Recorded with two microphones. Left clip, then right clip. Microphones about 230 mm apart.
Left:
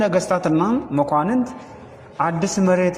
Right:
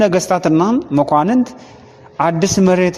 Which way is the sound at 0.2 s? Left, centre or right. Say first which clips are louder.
Right 5 dB; right.